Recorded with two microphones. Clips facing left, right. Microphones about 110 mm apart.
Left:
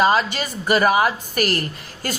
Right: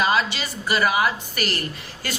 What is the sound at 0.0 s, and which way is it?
A woman's voice, 40° left (ahead or behind).